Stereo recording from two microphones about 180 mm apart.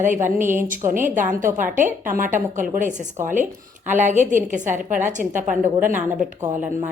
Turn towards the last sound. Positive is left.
turn(degrees=-45)  # may be behind; listen again after turning